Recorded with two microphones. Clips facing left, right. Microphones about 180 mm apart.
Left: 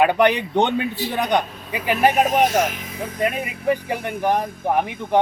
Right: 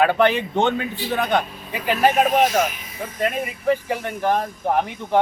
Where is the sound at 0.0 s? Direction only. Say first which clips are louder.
Left 1 dB; 15° left (ahead or behind).